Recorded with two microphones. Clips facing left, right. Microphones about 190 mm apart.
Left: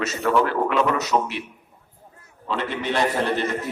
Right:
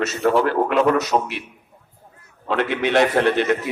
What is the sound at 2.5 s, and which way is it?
A man's voice, 65° right (ahead or behind).